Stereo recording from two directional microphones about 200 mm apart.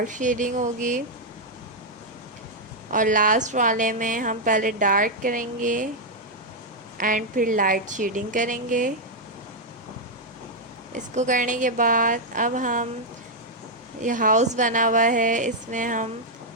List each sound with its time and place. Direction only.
0.0 s a woman's voice: 40° right (ahead or behind)
2.9 s a woman's voice: 40° right (ahead or behind)
7.0 s a woman's voice: 40° right (ahead or behind)
10.9 s a woman's voice: 35° right (ahead or behind)
14.0 s a woman's voice: 40° right (ahead or behind)